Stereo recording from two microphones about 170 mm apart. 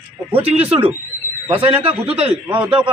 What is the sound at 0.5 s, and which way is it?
A man's voice, 35° right (ahead or behind).